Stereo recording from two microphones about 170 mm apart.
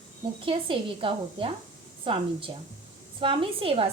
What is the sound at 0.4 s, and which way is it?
A woman's voice, 30° right (ahead or behind).